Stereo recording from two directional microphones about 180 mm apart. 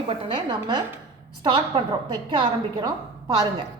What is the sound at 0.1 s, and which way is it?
A woman's voice, 30° right (ahead or behind).